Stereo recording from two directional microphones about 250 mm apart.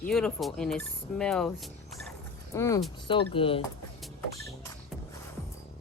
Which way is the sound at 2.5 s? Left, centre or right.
Centre.